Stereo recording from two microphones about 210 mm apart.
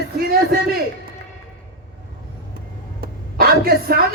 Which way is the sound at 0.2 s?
45° right (ahead or behind).